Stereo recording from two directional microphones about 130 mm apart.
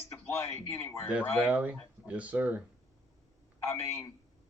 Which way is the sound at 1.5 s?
10° right (ahead or behind).